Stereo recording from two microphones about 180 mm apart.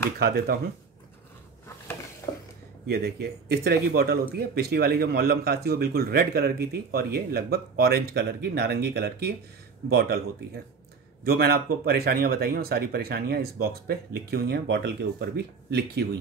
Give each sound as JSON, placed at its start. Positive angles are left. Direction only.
{"t": 0.2, "sound": "speech", "side_deg": -55}
{"t": 2.3, "sound": "a sound", "side_deg": 20}
{"t": 2.9, "sound": "speech", "side_deg": -60}